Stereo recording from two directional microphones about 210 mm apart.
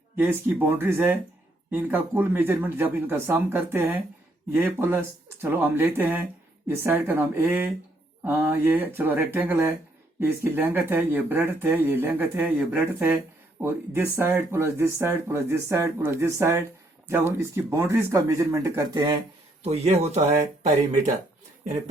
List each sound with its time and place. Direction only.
0.2 s speech: 10° right (ahead or behind)
19.6 s speech: 30° right (ahead or behind)